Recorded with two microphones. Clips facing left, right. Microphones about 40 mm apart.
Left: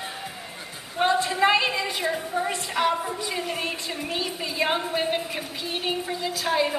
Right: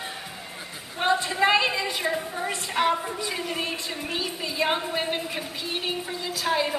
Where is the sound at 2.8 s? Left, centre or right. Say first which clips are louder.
Even; right.